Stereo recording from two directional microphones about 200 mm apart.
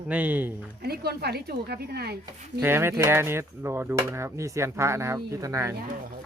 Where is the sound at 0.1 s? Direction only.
10° right (ahead or behind).